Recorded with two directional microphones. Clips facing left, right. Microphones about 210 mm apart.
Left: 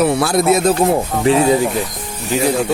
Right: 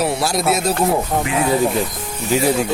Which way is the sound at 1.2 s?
30° left (ahead or behind).